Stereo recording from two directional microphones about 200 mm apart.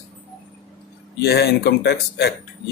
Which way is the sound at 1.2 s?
55° left (ahead or behind).